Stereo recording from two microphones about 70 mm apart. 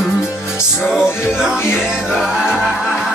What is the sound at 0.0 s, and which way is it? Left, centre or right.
Music, centre.